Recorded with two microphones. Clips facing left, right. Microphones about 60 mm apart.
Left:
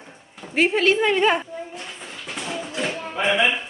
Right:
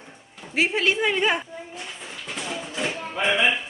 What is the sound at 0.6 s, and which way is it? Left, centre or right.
Speech, centre.